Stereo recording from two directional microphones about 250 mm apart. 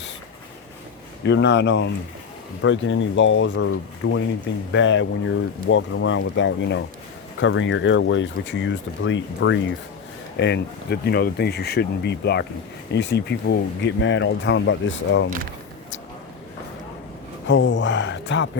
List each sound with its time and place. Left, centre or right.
1.2 s speech: left
17.4 s speech: left